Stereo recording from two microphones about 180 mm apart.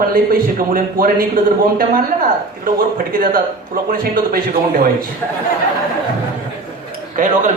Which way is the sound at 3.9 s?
55° right (ahead or behind).